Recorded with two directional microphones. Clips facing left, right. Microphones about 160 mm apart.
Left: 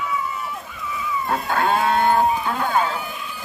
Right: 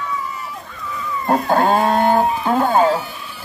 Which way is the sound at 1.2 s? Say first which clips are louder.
Right 7 dB; 45° right (ahead or behind).